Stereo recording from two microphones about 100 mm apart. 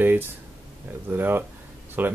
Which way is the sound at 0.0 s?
20° right (ahead or behind).